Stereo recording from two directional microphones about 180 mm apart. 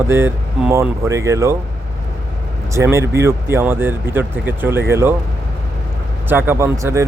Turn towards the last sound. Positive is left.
turn(degrees=-15)  # may be behind; listen again after turning